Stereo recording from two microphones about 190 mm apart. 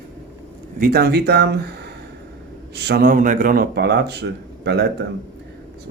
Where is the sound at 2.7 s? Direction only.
55° right (ahead or behind).